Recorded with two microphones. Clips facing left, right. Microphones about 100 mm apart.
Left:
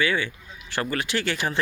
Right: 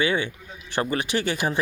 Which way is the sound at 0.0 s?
20° right (ahead or behind).